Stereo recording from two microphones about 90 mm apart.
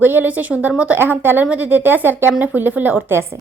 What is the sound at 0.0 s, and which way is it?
A woman's voice, 20° right (ahead or behind).